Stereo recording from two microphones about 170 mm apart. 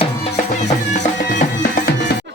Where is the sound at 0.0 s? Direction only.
40° left (ahead or behind).